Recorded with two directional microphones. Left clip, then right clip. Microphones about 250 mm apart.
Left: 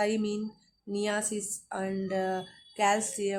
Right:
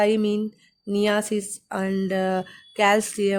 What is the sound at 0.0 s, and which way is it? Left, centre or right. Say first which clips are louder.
Speech: right 9 dB; right.